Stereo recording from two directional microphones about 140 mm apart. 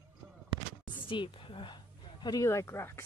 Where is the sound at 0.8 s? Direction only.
35° left (ahead or behind); by 3.0 s 20° left (ahead or behind).